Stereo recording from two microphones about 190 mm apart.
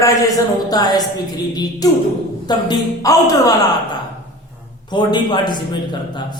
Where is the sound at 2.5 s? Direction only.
20° left (ahead or behind).